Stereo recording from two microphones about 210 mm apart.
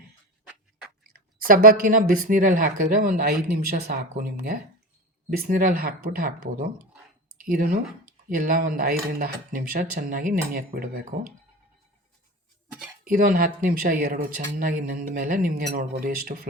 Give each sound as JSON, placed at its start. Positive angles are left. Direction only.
{"t": 1.5, "sound": "speech", "side_deg": -40}
{"t": 13.1, "sound": "speech", "side_deg": -40}